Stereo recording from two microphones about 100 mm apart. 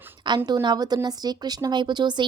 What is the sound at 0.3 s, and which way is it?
A woman's voice, 45° right (ahead or behind).